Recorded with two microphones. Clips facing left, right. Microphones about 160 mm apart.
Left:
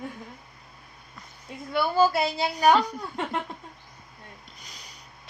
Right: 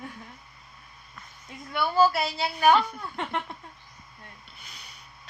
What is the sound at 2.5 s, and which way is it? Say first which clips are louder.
Speech: even; 35° left (ahead or behind).